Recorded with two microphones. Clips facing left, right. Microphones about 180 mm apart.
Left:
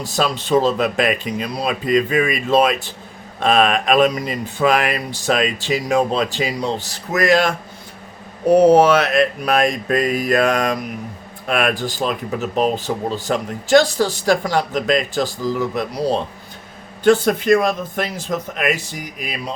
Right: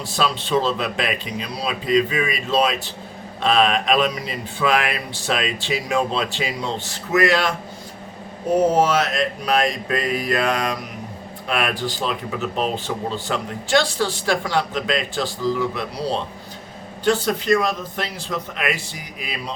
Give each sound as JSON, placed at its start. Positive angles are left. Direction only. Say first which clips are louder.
{"t": 0.0, "sound": "speech", "louder": "left 2 dB", "side_deg": 45}
{"t": 8.4, "sound": "speech", "louder": "left 6 dB", "side_deg": 70}